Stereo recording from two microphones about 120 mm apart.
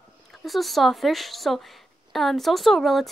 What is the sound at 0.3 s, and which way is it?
Speech, centre (ahead or behind).